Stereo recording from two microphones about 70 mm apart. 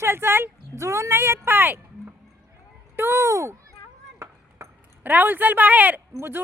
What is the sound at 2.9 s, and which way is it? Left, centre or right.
Speech, right.